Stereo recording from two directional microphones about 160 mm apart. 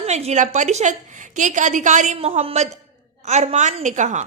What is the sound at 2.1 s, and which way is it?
A woman's voice, 35° right (ahead or behind).